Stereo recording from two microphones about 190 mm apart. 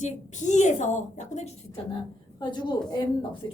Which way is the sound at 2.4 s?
25° left (ahead or behind).